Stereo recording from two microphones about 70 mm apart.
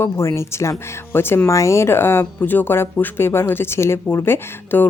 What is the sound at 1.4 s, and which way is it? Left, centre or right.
Speech, left.